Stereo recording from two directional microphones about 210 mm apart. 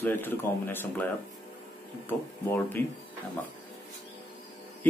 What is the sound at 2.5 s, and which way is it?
Speech, 10° left (ahead or behind).